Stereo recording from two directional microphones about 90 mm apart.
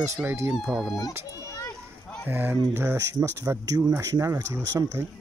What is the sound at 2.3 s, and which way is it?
Speech, 25° right (ahead or behind).